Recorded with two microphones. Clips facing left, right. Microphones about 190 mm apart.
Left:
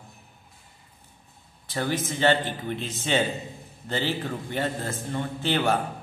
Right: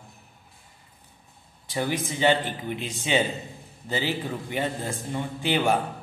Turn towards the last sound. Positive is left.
turn(degrees=-15)  # may be behind; listen again after turning